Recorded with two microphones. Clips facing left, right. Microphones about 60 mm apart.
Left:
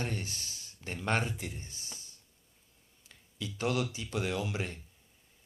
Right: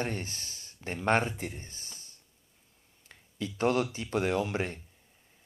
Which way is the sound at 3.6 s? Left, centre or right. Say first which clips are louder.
Right 5 dB; right.